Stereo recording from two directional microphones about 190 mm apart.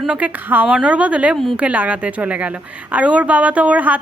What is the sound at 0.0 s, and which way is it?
A woman's voice, 5° right (ahead or behind).